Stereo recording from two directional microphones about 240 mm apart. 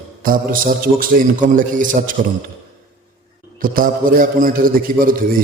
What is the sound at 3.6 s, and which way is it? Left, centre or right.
A man's voice, right.